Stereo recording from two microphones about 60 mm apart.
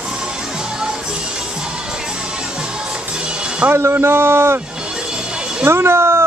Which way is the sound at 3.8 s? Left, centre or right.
Right.